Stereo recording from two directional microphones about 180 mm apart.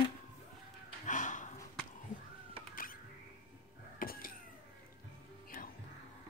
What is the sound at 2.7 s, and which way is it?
Music, 50° left (ahead or behind).